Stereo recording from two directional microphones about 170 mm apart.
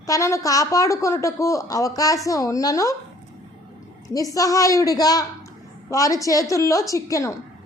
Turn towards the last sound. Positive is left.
turn(degrees=20)  # may be behind; listen again after turning